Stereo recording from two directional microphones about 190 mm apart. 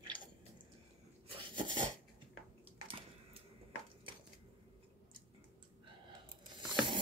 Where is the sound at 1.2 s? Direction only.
25° right (ahead or behind).